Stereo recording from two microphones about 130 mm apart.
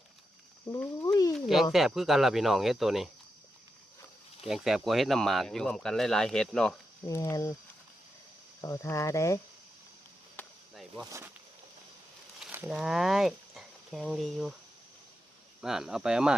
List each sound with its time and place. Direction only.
0.7 s a sound: 25° left (ahead or behind)
1.7 s speech: centre (ahead or behind)
4.4 s speech: centre (ahead or behind)
7.1 s speech: 25° left (ahead or behind)
8.6 s speech: 25° left (ahead or behind)
10.4 s chop: 15° left (ahead or behind)
10.8 s speech: centre (ahead or behind)
12.7 s speech: centre (ahead or behind)
15.6 s speech: 5° right (ahead or behind)